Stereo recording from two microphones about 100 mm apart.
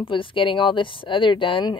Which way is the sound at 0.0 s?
60° left (ahead or behind).